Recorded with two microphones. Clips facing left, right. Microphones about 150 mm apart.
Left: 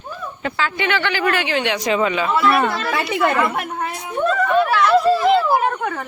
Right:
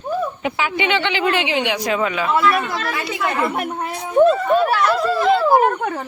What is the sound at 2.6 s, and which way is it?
Speech, 70° left (ahead or behind).